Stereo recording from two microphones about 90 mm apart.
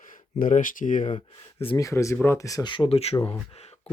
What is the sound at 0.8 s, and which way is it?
Speech, 90° left.